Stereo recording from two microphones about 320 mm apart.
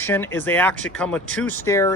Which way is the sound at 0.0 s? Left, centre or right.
Centre.